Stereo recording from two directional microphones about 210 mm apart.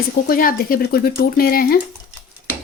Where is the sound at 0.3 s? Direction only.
45° left (ahead or behind).